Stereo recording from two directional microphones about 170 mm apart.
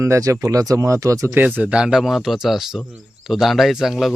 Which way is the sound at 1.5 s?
5° right (ahead or behind).